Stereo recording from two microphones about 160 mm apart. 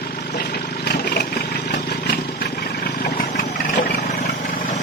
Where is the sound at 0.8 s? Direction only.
85° left.